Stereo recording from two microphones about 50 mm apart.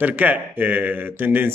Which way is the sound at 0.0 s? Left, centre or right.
Right.